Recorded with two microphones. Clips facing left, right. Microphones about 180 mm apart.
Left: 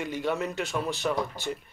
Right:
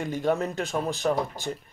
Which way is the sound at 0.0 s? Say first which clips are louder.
Right 3 dB; 45° right (ahead or behind).